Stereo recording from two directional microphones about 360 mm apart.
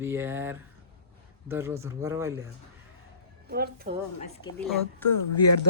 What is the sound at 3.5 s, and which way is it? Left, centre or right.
Speech, right.